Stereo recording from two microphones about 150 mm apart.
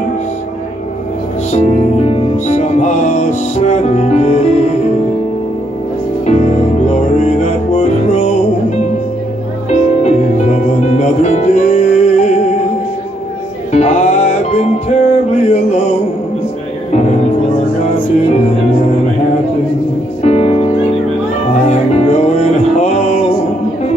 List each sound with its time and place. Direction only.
1.5 s music: 50° left (ahead or behind)
6.2 s music: 50° left (ahead or behind)
13.7 s music: 50° left (ahead or behind)
16.9 s music: 50° left (ahead or behind)
18.3 s music: 45° left (ahead or behind)
20.2 s music: 45° left (ahead or behind)
21.6 s music: 45° left (ahead or behind)